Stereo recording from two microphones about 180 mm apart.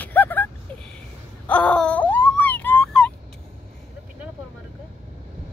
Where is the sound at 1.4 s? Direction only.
5° left (ahead or behind).